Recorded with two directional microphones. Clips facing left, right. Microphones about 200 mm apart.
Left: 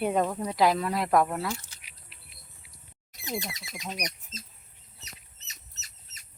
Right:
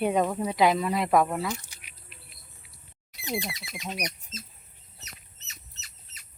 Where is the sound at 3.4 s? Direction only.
45° left (ahead or behind).